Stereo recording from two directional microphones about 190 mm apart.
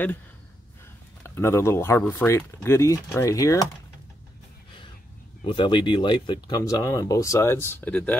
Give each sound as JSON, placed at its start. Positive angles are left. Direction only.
{"t": 1.2, "sound": "speech", "side_deg": 15}
{"t": 5.4, "sound": "speech", "side_deg": 25}